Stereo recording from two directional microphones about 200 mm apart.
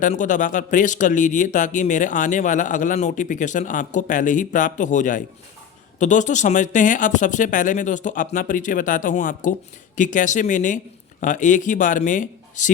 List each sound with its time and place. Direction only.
0.0 s a man's voice: 40° left (ahead or behind)